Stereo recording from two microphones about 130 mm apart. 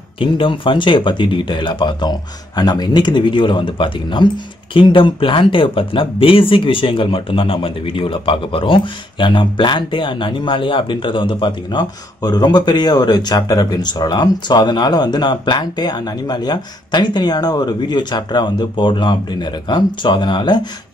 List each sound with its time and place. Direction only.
0.2 s speech: 40° left (ahead or behind)